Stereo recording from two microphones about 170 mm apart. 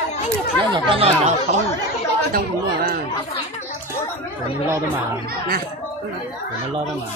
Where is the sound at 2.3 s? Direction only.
60° right (ahead or behind).